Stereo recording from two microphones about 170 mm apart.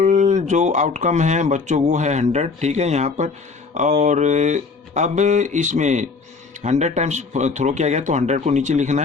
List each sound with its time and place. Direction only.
0.0 s speech: 45° right (ahead or behind)